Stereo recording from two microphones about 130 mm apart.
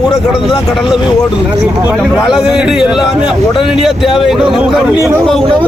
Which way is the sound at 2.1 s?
5° right (ahead or behind).